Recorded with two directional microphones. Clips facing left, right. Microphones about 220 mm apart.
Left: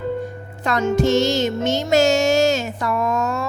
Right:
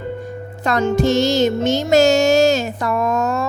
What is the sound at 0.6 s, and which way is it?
Music, 35° right (ahead or behind).